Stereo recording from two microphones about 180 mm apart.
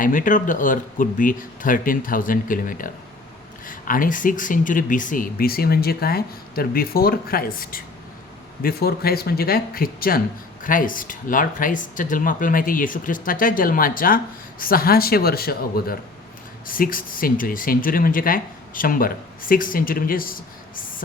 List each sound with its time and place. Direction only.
0.0 s speech: 45° left (ahead or behind)